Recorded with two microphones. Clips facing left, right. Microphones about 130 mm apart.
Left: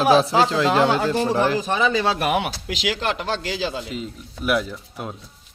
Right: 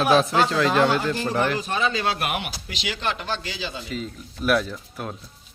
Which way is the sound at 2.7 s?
80° left.